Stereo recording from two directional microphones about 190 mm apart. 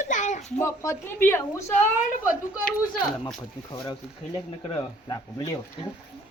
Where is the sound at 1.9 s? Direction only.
40° left (ahead or behind).